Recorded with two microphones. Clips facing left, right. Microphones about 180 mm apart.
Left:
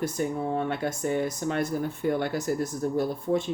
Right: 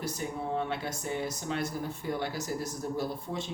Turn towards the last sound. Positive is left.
turn(degrees=55)  # may be behind; listen again after turning